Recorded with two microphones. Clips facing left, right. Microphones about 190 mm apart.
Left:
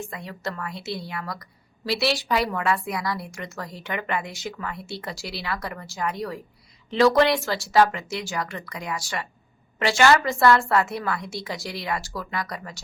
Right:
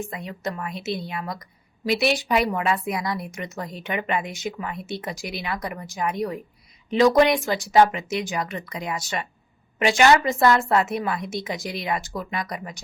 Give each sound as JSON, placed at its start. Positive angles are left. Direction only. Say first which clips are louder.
{"t": 0.0, "sound": "a woman's voice", "louder": "right 2 dB", "side_deg": -20}